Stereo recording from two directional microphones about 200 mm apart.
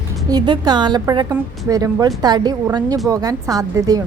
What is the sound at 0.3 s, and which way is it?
A woman's voice, 20° right (ahead or behind).